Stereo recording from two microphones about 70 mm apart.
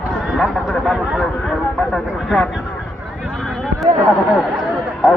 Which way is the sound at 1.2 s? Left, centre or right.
Centre.